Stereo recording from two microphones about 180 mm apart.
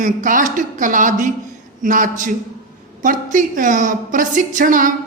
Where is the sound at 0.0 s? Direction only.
45° right (ahead or behind).